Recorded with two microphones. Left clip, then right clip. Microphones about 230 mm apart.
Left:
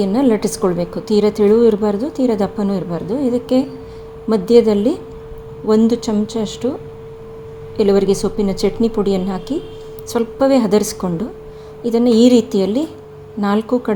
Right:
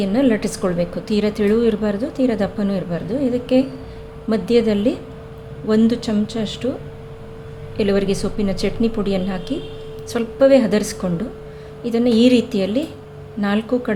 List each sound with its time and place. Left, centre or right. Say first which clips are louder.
0.0 s a woman's voice: left 3 dB; centre
7.8 s a woman's voice: left 5 dB; centre